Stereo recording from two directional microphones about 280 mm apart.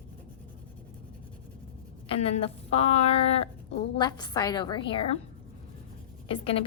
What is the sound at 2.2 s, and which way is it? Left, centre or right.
A woman's voice, left.